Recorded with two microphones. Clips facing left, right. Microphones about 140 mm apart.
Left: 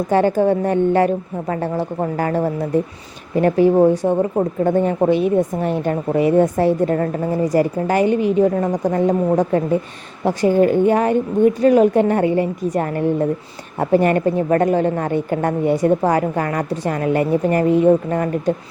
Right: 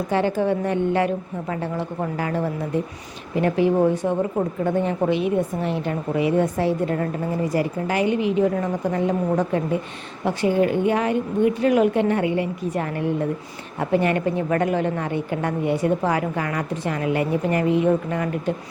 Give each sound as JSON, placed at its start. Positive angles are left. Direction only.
{"t": 0.1, "sound": "a woman's voice", "side_deg": 45}